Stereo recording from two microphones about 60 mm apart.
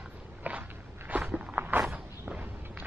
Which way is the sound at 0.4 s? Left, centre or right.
Right.